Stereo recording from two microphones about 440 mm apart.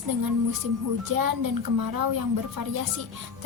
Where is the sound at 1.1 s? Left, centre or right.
Right.